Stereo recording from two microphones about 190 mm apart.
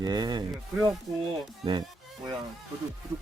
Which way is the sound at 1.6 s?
25° right (ahead or behind).